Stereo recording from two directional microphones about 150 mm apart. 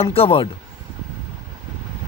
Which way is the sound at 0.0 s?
40° left (ahead or behind).